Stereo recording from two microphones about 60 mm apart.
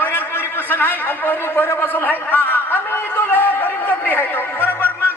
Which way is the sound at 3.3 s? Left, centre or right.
Left.